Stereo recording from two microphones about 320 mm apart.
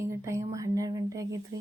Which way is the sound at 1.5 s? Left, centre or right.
Right.